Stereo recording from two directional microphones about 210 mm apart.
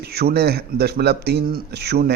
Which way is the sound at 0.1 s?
50° right (ahead or behind).